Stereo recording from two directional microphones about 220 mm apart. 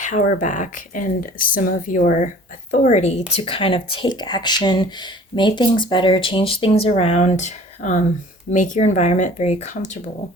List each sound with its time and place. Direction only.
0.0 s speech: 35° left (ahead or behind)